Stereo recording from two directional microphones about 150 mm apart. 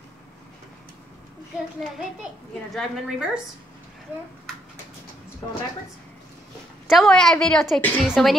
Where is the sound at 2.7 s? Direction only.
Centre (ahead or behind).